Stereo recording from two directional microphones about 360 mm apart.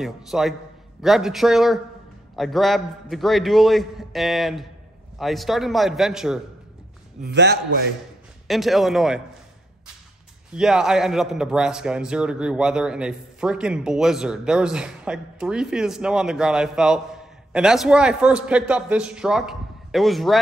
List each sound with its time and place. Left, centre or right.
0.0 s a man's voice: centre
7.2 s a man's voice: right
8.5 s a man's voice: centre
10.5 s a man's voice: centre